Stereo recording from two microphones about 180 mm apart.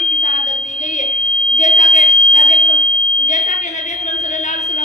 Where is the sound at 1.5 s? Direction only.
40° left (ahead or behind).